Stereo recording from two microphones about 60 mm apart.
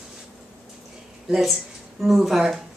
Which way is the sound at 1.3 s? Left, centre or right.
Centre.